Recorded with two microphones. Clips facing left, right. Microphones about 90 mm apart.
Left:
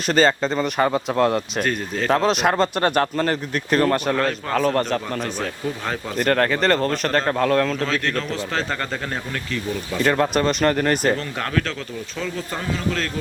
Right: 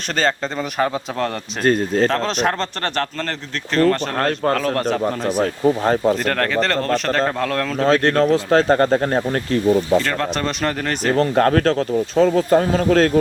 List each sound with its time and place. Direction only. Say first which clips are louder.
0.1 s speech: left 3 dB; 5° left (ahead or behind)
1.6 s speech: right 8 dB; 35° right (ahead or behind)
2.0 s speech: left 1 dB; 5° left (ahead or behind)
4.1 s speech: right 3 dB; 50° right (ahead or behind)
4.5 s speech: even; centre (ahead or behind)
5.6 s speech: right 14 dB; 40° right (ahead or behind)
6.1 s speech: even; 5° left (ahead or behind)
7.9 s speech: right 9 dB; 40° right (ahead or behind)
10.0 s speech: left 3 dB; 10° left (ahead or behind)
11.2 s speech: right 10 dB; 45° right (ahead or behind)